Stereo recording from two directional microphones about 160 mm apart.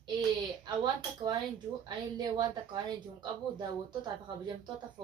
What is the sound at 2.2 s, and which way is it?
Speech, 25° right (ahead or behind).